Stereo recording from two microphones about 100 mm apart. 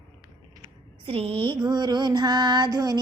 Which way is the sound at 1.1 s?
70° right (ahead or behind).